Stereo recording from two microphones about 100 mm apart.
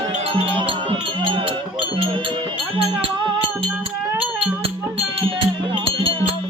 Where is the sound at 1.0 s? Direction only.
55° right (ahead or behind).